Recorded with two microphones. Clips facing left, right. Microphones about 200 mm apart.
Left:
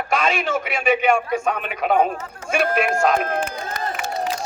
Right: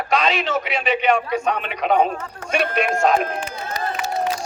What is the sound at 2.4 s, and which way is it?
Speech, 60° right (ahead or behind).